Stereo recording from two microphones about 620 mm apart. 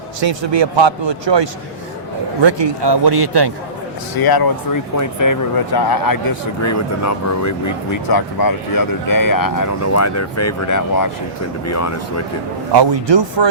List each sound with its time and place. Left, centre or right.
0.2 s a man's voice: right
4.2 s speech: left
12.7 s speech: right